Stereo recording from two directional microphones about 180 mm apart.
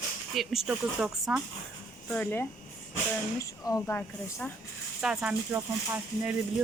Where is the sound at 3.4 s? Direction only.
20° left (ahead or behind).